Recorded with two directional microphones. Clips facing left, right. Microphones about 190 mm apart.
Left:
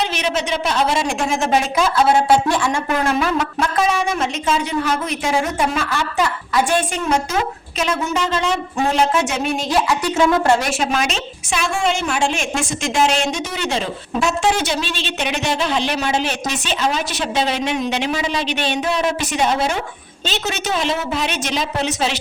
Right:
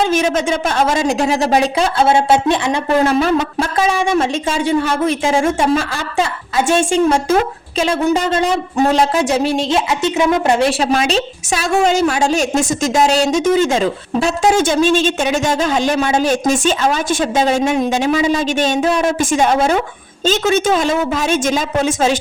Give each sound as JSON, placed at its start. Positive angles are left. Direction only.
{"t": 0.0, "sound": "a woman's voice", "side_deg": -45}
{"t": 8.1, "sound": "a woman's voice", "side_deg": -35}
{"t": 10.6, "sound": "a woman's voice", "side_deg": -35}
{"t": 14.2, "sound": "a woman's voice", "side_deg": -35}
{"t": 14.5, "sound": "speech", "side_deg": -50}